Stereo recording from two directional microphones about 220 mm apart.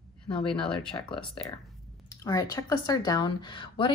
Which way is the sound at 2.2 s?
15° left (ahead or behind).